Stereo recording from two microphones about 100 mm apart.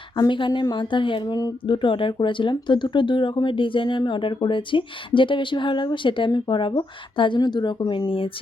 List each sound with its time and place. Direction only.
0.3 s a woman's voice: 55° left (ahead or behind)
1.6 s speech: 55° left (ahead or behind)